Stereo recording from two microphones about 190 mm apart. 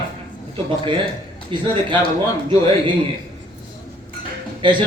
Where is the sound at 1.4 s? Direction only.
25° right (ahead or behind).